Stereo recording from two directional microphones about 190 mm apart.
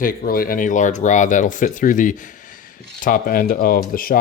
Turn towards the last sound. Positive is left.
turn(degrees=50)  # may be behind; listen again after turning